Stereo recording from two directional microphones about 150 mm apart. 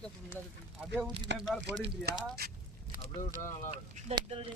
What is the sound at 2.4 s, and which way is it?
Speech, 90° right.